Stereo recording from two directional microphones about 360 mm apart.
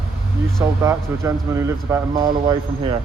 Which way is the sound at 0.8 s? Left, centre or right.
Centre.